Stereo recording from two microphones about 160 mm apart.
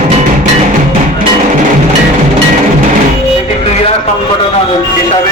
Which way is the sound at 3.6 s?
40° left (ahead or behind).